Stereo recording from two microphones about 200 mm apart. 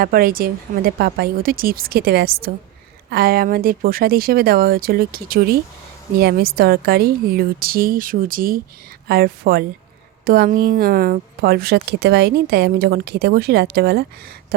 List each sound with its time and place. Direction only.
0.0 s speech: 45° right (ahead or behind)